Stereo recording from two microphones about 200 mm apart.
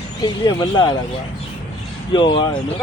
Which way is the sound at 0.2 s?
20° left (ahead or behind).